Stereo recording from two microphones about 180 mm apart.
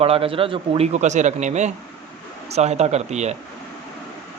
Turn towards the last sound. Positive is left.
turn(degrees=-40)  # may be behind; listen again after turning